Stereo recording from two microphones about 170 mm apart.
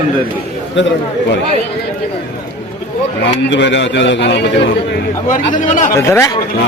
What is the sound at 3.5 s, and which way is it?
A man's voice, 90° left.